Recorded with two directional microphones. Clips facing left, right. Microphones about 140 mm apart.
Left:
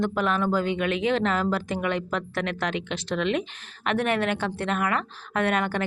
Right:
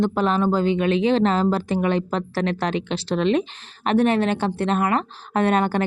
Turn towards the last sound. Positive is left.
turn(degrees=-35)  # may be behind; listen again after turning